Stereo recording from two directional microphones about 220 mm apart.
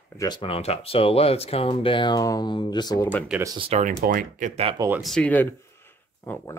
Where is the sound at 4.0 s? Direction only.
40° right (ahead or behind).